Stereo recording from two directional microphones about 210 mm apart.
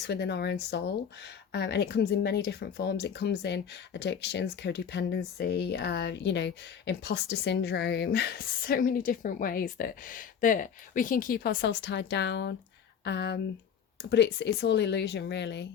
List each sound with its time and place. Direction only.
0.0 s speech: 55° left (ahead or behind)